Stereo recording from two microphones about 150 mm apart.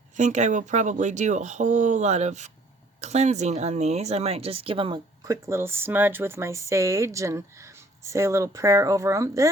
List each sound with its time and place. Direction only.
0.2 s speech: 50° right (ahead or behind); by 9.5 s 20° right (ahead or behind)